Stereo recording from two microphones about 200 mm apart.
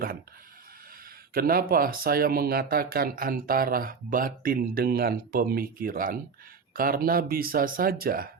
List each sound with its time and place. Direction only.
1.3 s speech: 45° right (ahead or behind)